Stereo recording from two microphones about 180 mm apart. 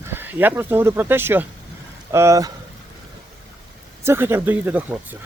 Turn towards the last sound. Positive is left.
turn(degrees=-10)  # may be behind; listen again after turning